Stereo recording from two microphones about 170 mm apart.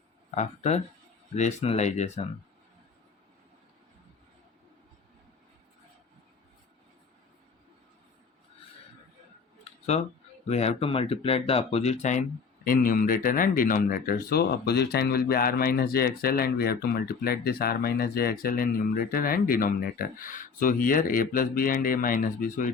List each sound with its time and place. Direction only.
0.3 s speech: 40° left (ahead or behind)
9.9 s speech: 40° left (ahead or behind)
12.6 s speech: 55° left (ahead or behind)